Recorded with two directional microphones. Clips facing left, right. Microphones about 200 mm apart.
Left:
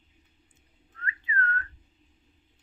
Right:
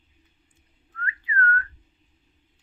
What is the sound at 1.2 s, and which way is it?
Whistling, 25° left (ahead or behind).